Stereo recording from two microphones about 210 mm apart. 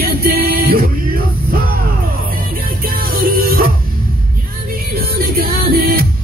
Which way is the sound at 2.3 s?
45° right (ahead or behind).